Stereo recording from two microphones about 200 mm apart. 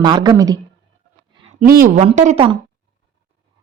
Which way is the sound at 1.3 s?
30° right (ahead or behind).